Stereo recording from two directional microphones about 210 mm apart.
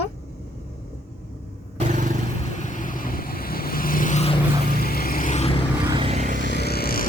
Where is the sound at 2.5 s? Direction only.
35° left (ahead or behind).